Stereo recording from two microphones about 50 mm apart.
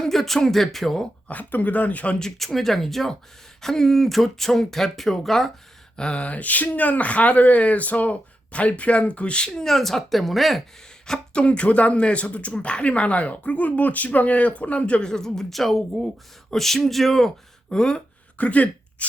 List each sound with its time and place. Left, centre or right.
0.0 s speech: centre
1.3 s speech: left
2.4 s speech: centre
6.0 s speech: left; by 10.6 s centre
11.0 s a sound: centre
11.4 s speech: left
15.1 s speech: centre
17.7 s speech: centre
18.3 s speech: left